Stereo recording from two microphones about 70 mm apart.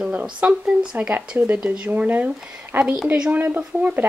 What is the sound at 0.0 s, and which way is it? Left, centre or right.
Speech, centre.